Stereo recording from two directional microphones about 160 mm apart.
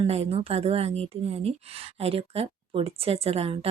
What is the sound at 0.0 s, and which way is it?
A woman's voice, 40° right (ahead or behind).